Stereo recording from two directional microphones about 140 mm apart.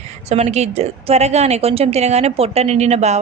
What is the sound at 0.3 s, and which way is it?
A woman's voice, 50° right (ahead or behind).